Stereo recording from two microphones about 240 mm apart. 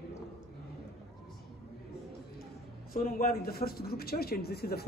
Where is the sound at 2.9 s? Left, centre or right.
Left.